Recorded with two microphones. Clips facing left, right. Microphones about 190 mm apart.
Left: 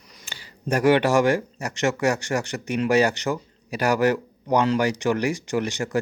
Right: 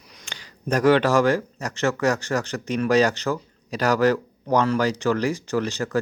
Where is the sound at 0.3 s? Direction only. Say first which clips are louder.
Right 2 dB; 5° left (ahead or behind).